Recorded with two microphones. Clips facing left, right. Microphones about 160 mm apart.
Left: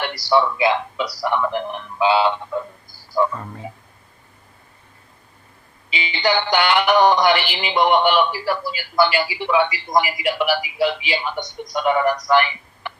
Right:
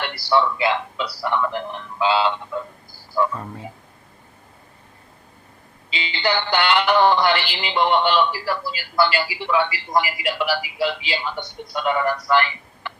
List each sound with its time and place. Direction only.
0.0 s speech: 15° left (ahead or behind)
5.9 s speech: 15° left (ahead or behind)
12.3 s a sound: 15° left (ahead or behind)